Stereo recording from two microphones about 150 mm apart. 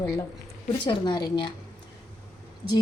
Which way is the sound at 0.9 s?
30° left (ahead or behind).